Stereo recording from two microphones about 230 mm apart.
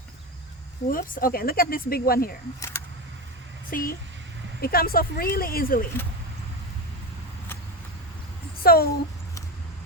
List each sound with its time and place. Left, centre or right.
0.9 s speech: left
2.6 s speech: centre
3.7 s speech: left
8.6 s speech: left